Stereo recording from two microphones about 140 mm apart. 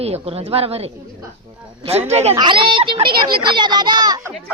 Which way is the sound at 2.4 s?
35° right (ahead or behind).